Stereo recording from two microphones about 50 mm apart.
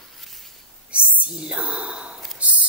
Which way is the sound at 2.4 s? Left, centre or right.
Right.